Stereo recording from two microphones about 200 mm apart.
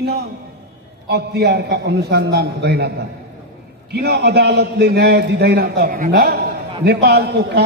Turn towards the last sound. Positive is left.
turn(degrees=-55)  # may be behind; listen again after turning